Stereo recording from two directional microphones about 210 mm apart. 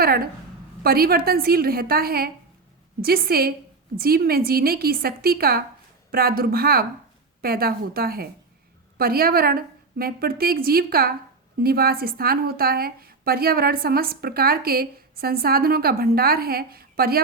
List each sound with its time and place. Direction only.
0.8 s a woman's voice: 45° right (ahead or behind)